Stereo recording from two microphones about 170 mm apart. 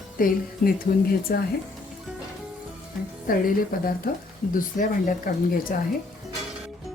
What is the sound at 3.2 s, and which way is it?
Speech, 60° left (ahead or behind).